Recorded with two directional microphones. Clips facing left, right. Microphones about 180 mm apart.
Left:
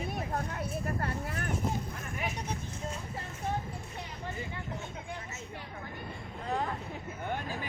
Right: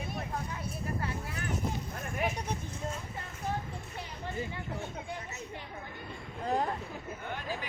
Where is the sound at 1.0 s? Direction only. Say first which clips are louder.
Left 2 dB; 50° left (ahead or behind).